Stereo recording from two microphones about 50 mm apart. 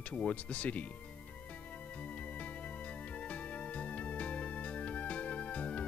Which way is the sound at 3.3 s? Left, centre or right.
Left.